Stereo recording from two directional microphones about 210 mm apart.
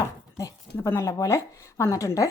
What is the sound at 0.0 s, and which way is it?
A woman's voice, 15° left (ahead or behind).